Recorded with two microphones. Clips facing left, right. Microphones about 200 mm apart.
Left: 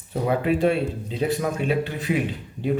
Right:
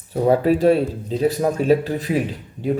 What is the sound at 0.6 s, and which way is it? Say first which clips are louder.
Speech: right 5 dB; 40° right (ahead or behind).